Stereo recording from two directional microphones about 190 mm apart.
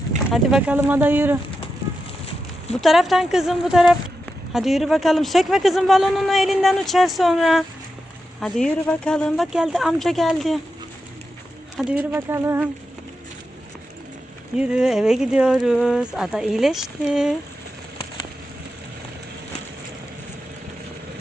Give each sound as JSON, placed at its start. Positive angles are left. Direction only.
{"t": 0.3, "sound": "speech", "side_deg": 0}
{"t": 2.8, "sound": "a man's voice", "side_deg": 0}
{"t": 11.8, "sound": "a man's voice", "side_deg": 0}
{"t": 12.1, "sound": "speech", "side_deg": -15}
{"t": 14.5, "sound": "a man's voice", "side_deg": -5}